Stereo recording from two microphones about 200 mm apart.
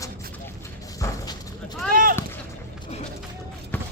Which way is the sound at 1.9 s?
45° right (ahead or behind).